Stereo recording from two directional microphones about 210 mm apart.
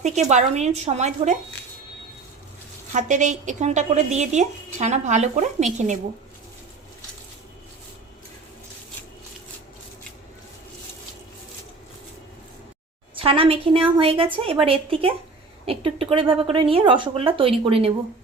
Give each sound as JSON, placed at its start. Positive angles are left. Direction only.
{"t": 0.0, "sound": "speech", "side_deg": -35}
{"t": 2.9, "sound": "speech", "side_deg": -35}
{"t": 13.1, "sound": "speech", "side_deg": -25}